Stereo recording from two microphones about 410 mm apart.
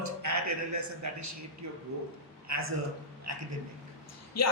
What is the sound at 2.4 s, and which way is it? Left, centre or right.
Speech, right.